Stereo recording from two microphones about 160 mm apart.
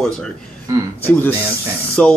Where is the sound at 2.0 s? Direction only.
10° left (ahead or behind).